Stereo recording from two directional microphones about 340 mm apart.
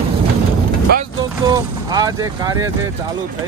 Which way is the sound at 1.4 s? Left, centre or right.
Centre.